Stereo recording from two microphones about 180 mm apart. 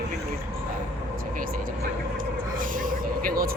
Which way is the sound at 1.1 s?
50° right (ahead or behind).